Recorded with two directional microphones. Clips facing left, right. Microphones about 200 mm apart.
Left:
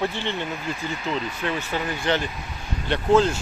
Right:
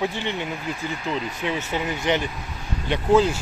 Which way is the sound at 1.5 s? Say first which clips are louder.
Right 1 dB; 20° right (ahead or behind).